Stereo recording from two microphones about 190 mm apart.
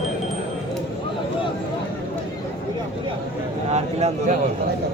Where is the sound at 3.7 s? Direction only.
35° right (ahead or behind).